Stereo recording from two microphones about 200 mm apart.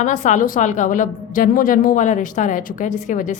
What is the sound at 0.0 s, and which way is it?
A woman's voice, 35° left (ahead or behind).